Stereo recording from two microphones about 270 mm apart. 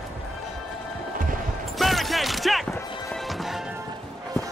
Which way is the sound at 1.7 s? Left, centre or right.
Centre.